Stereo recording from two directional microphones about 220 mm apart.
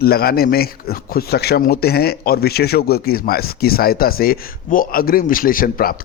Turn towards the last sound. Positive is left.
turn(degrees=40)  # may be behind; listen again after turning